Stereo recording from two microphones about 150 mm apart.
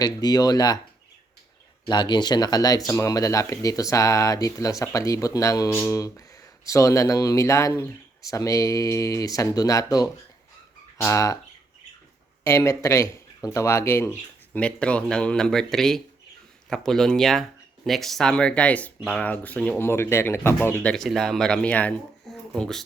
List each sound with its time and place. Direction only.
0.0 s speech: 25° left (ahead or behind)
1.9 s speech: 30° left (ahead or behind)
12.5 s speech: 20° left (ahead or behind)
20.9 s speech: centre (ahead or behind)